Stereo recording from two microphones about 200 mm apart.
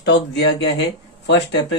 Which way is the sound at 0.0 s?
60° left (ahead or behind).